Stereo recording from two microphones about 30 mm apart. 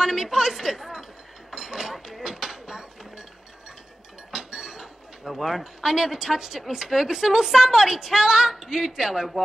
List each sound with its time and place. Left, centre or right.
0.0 s a woman's voice: centre
1.5 s a sound: centre
4.3 s chink: centre
5.2 s speech: centre
5.6 s a woman's voice: centre